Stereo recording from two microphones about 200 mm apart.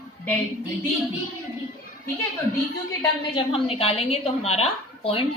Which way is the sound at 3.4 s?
30° left (ahead or behind).